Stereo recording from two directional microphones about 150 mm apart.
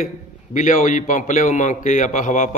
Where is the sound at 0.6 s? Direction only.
55° left (ahead or behind).